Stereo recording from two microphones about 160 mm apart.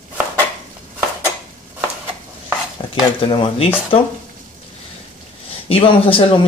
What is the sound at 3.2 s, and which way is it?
Speech, 35° left (ahead or behind).